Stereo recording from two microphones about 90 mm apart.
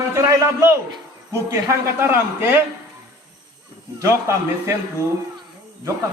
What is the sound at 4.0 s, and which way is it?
Speech, 35° right (ahead or behind).